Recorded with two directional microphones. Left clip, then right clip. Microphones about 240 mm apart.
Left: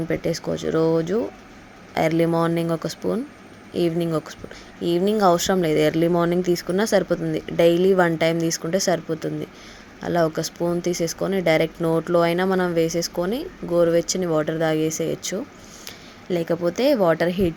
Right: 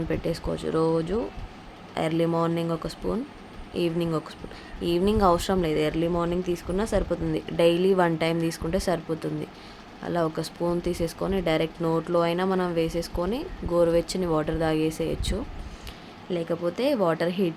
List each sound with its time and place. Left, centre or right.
0.1 s speech: centre